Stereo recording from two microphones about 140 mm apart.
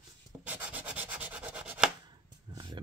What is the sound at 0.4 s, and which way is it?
Rub, 10° right (ahead or behind).